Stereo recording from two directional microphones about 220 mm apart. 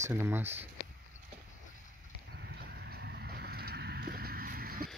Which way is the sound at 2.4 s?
50° right (ahead or behind).